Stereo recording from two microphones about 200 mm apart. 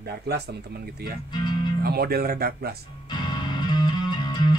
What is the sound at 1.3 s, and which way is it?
Speech, 20° left (ahead or behind).